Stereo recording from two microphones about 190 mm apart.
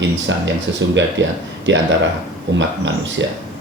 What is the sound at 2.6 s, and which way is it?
Speech, 70° right (ahead or behind).